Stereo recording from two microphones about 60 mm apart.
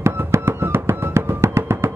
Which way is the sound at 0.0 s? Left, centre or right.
Right.